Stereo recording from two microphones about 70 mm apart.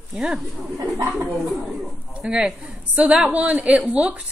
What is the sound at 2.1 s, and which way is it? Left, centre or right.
A woman's voice, centre.